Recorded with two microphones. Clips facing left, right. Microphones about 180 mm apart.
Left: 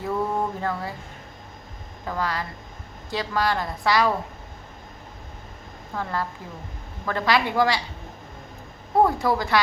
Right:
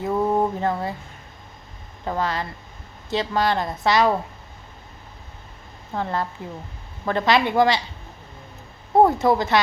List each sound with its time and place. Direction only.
0.0 s a sound: 20° right (ahead or behind)
2.0 s a woman's voice: 25° right (ahead or behind)
5.9 s a woman's voice: 25° right (ahead or behind)
9.0 s a woman's voice: 20° right (ahead or behind)